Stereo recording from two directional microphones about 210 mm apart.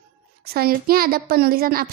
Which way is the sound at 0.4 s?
45° right (ahead or behind).